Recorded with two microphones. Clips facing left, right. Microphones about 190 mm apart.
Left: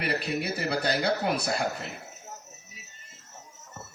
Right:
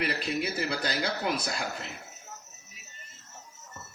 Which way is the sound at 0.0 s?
60° left (ahead or behind).